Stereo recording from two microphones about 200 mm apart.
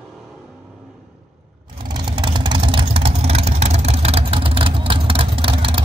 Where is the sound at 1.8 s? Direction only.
20° right (ahead or behind).